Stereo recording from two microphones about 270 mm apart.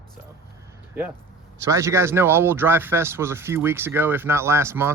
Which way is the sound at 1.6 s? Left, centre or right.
Centre.